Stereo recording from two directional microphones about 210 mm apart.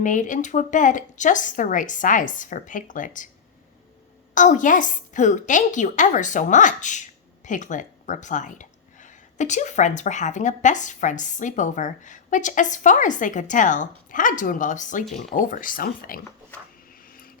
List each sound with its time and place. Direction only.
0.0 s speech: 35° left (ahead or behind)
4.4 s speech: 35° left (ahead or behind)
17.1 s vehicle: 45° left (ahead or behind)